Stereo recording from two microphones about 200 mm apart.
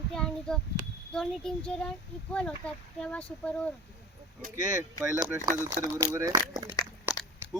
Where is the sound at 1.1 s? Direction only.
5° left (ahead or behind).